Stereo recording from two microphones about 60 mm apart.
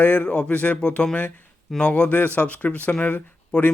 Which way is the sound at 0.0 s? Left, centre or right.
Left.